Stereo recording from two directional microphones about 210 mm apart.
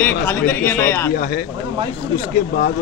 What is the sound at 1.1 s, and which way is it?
Speech, 45° left (ahead or behind).